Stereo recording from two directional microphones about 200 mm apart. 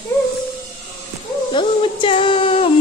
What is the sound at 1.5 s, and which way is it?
Female singing, 25° left (ahead or behind).